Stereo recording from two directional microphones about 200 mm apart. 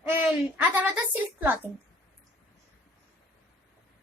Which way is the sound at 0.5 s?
10° right (ahead or behind).